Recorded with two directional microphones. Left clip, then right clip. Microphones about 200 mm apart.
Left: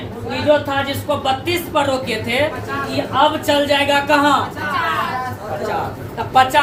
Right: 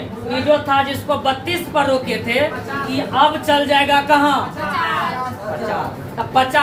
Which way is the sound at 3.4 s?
20° left (ahead or behind).